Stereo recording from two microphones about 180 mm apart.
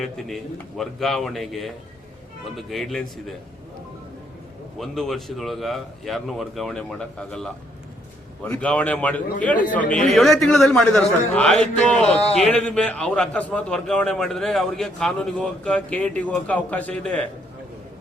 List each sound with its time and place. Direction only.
0.0 s a man's voice: centre (ahead or behind)
4.8 s a man's voice: centre (ahead or behind)
11.9 s speech: 35° left (ahead or behind)
12.4 s a man's voice: 5° left (ahead or behind)